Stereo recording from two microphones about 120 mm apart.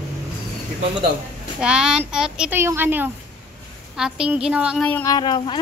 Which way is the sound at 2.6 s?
20° right (ahead or behind).